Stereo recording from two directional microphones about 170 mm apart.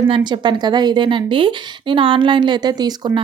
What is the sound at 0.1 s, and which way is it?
A woman's voice, 25° right (ahead or behind).